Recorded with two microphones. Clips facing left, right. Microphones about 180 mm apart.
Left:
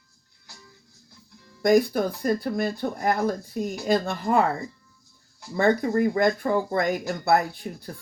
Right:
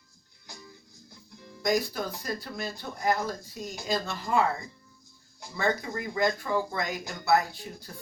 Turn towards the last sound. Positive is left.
turn(degrees=55)  # may be behind; listen again after turning